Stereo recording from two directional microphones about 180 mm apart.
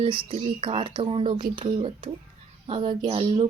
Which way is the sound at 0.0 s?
30° right (ahead or behind).